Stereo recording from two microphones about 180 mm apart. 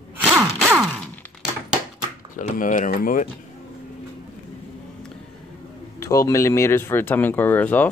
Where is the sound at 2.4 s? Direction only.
45° left (ahead or behind).